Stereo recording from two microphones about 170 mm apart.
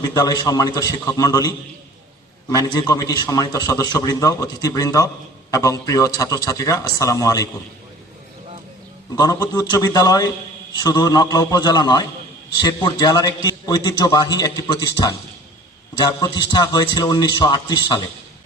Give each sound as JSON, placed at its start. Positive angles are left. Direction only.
{"t": 0.0, "sound": "a man's voice", "side_deg": 20}
{"t": 9.1, "sound": "a man's voice", "side_deg": 20}